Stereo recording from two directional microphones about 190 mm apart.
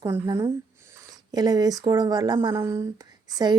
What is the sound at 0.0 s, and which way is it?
Speech, 15° right (ahead or behind).